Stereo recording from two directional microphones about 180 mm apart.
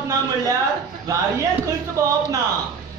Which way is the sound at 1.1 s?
20° right (ahead or behind).